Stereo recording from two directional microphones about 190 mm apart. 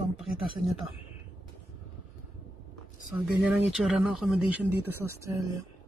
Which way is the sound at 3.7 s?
Centre (ahead or behind).